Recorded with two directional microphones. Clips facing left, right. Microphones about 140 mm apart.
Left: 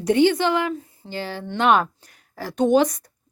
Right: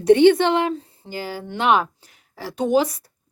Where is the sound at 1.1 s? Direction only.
10° right (ahead or behind).